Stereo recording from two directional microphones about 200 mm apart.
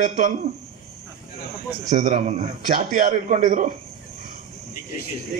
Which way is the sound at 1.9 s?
40° right (ahead or behind).